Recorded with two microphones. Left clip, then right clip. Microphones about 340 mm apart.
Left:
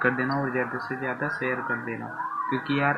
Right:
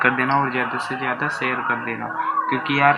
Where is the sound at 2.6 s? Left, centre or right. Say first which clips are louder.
Right 9 dB; centre.